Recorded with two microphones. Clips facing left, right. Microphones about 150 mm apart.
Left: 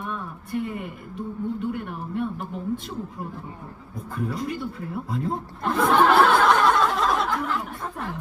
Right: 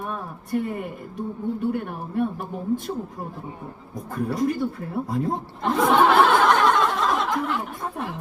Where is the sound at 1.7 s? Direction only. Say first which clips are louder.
Right 3 dB; 45° right (ahead or behind).